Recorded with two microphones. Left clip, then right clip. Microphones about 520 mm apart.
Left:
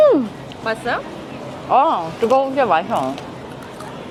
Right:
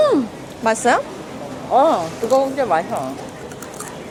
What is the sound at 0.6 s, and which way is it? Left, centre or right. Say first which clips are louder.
Speech: right 6 dB; right.